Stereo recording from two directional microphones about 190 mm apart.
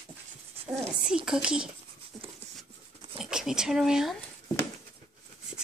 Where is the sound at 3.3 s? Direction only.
5° right (ahead or behind).